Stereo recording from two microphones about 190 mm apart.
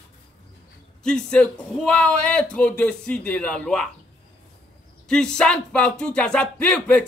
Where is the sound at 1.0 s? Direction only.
5° left (ahead or behind).